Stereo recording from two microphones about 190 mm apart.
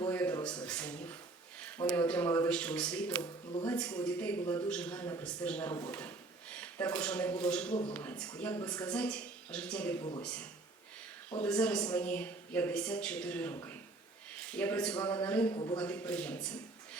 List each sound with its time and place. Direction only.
0.1 s a sound: 10° left (ahead or behind)
1.6 s a man's voice: 10° left (ahead or behind)
7.7 s a man's voice: 25° left (ahead or behind)
8.4 s a man's voice: 10° left (ahead or behind)
10.0 s a man's voice: 25° left (ahead or behind)
11.4 s a man's voice: 5° left (ahead or behind)
15.5 s a man's voice: 25° left (ahead or behind)
15.8 s a man's voice: 5° left (ahead or behind)